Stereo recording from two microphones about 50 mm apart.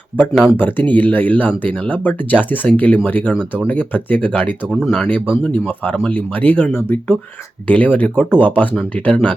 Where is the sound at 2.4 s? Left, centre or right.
Left.